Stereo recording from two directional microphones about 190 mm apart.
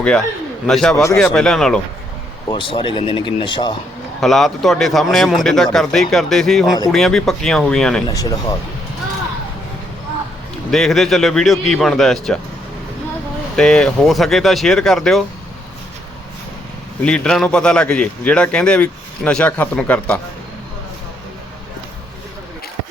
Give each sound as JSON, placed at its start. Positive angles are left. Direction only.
{"t": 0.7, "sound": "a man's voice", "side_deg": 0}
{"t": 2.5, "sound": "speech", "side_deg": 25}
{"t": 4.2, "sound": "a man's voice", "side_deg": 0}
{"t": 8.0, "sound": "speech", "side_deg": 20}
{"t": 10.7, "sound": "a man's voice", "side_deg": 0}
{"t": 13.6, "sound": "a man's voice", "side_deg": 5}
{"t": 17.0, "sound": "a man's voice", "side_deg": 5}